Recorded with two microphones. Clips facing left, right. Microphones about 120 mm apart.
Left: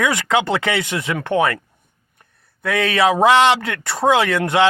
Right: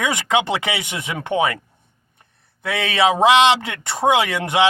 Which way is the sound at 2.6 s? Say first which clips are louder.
Left 2 dB; 20° right (ahead or behind).